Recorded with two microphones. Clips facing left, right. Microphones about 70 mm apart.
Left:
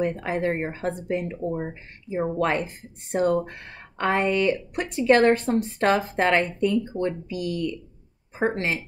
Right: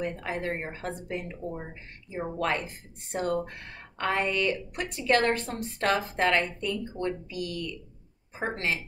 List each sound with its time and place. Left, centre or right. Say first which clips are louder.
0.0 s a woman's voice: left 7 dB; left